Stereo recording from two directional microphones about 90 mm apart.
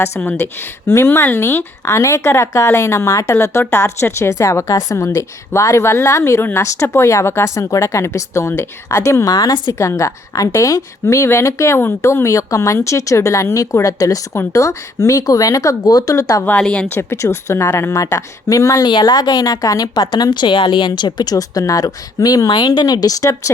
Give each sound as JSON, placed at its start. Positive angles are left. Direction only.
{"t": 0.2, "sound": "speech", "side_deg": 20}
{"t": 9.7, "sound": "speech", "side_deg": 30}
{"t": 16.6, "sound": "speech", "side_deg": 10}
{"t": 16.9, "sound": "speech", "side_deg": 30}
{"t": 18.9, "sound": "speech", "side_deg": 55}